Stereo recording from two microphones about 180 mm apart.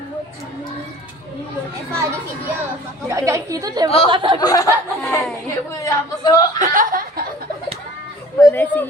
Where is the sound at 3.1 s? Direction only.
15° right (ahead or behind).